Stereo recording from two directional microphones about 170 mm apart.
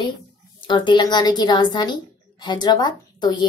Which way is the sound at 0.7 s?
25° left (ahead or behind).